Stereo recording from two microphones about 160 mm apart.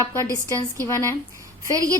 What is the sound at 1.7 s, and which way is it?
Speech, 20° right (ahead or behind).